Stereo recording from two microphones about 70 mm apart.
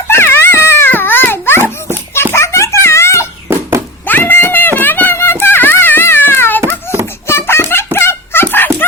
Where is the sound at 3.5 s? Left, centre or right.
Right.